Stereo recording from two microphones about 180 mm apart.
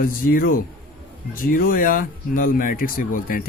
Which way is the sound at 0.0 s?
50° left (ahead or behind).